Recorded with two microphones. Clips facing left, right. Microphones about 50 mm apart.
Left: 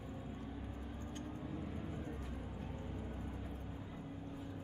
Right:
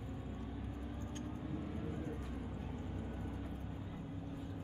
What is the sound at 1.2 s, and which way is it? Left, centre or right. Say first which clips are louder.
Vehicle: right 2 dB; centre.